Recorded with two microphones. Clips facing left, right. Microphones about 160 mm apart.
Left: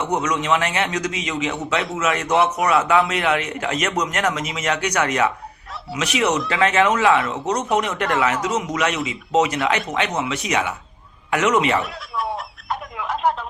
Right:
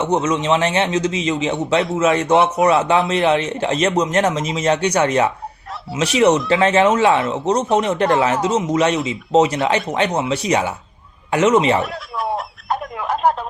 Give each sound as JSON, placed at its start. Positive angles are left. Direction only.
{"t": 0.0, "sound": "a man's voice", "side_deg": -25}
{"t": 11.8, "sound": "speech", "side_deg": 0}
{"t": 12.3, "sound": "a sound", "side_deg": -45}